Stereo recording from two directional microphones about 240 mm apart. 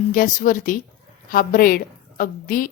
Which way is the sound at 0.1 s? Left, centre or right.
Left.